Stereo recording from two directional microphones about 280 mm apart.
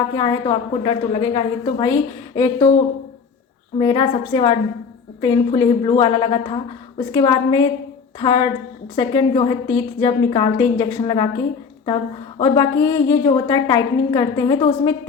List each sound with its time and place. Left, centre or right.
0.1 s a woman's voice: centre
3.8 s a woman's voice: centre
12.4 s a woman's voice: centre